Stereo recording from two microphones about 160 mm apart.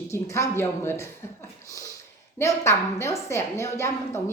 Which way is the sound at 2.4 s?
15° left (ahead or behind).